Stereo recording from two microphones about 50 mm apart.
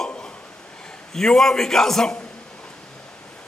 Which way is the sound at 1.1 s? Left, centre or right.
Centre.